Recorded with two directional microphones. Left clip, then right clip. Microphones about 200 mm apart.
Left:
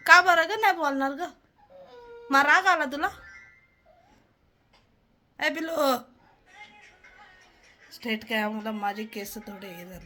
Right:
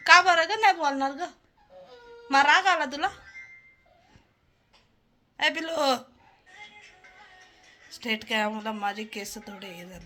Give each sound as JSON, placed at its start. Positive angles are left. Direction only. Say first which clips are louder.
{"t": 0.0, "sound": "a woman's voice", "louder": "even", "side_deg": 15}
{"t": 5.4, "sound": "a man's voice", "louder": "even", "side_deg": 10}
{"t": 7.9, "sound": "a woman's voice", "louder": "right 1 dB", "side_deg": 0}